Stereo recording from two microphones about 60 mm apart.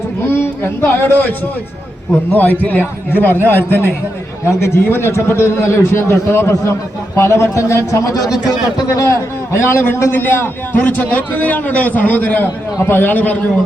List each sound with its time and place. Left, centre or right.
0.3 s a man's voice: left
2.3 s a man's voice: left
9.0 s a man's voice: left